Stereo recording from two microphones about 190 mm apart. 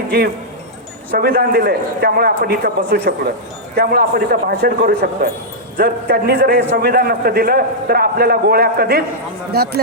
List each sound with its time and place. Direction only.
1.1 s a man's voice: 55° right (ahead or behind)